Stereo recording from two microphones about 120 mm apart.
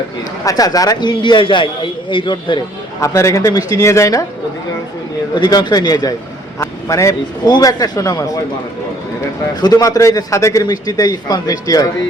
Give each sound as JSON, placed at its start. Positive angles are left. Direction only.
{"t": 0.4, "sound": "a man's voice", "side_deg": 30}
{"t": 3.0, "sound": "a man's voice", "side_deg": 25}
{"t": 5.3, "sound": "a man's voice", "side_deg": 35}
{"t": 9.6, "sound": "a man's voice", "side_deg": 35}